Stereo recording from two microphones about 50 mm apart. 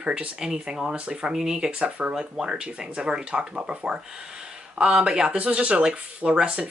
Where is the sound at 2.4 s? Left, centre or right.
Centre.